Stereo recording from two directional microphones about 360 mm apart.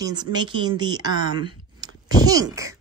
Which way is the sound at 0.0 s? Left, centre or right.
Centre.